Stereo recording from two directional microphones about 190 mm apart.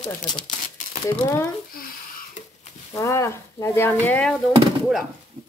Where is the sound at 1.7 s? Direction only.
50° left (ahead or behind).